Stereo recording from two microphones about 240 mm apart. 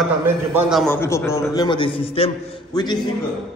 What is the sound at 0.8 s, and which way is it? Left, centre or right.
A man's voice, centre.